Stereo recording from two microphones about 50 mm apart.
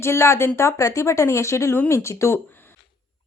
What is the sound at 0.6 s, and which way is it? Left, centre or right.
A woman's voice, left.